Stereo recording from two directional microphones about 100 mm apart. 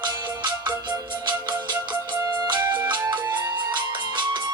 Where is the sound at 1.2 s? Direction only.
50° right (ahead or behind).